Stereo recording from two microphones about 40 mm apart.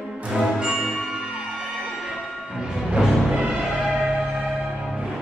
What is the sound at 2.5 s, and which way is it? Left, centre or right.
Music, centre.